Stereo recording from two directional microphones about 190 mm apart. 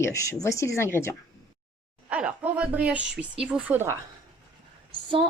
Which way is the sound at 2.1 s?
5° right (ahead or behind).